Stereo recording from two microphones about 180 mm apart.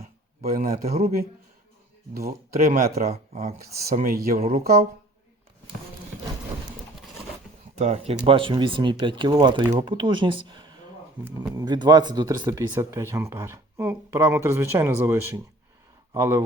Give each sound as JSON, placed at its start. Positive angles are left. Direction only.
{"t": 0.0, "sound": "a sound", "side_deg": -55}
{"t": 1.0, "sound": "speech", "side_deg": -55}
{"t": 3.1, "sound": "speech", "side_deg": -35}
{"t": 3.8, "sound": "speech", "side_deg": -55}
{"t": 7.8, "sound": "speech", "side_deg": -35}